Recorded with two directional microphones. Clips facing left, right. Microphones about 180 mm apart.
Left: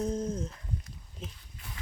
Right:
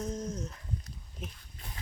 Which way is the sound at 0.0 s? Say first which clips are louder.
Left 4 dB; 30° left (ahead or behind).